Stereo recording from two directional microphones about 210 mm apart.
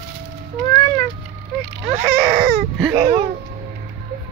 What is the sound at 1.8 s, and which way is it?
Baby cry, 45° right (ahead or behind).